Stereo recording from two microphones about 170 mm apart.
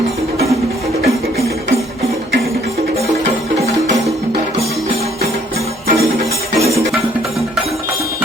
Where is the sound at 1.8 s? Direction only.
35° right (ahead or behind).